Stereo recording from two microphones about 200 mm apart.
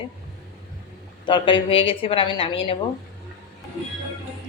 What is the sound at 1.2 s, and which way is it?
Speech, 25° left (ahead or behind).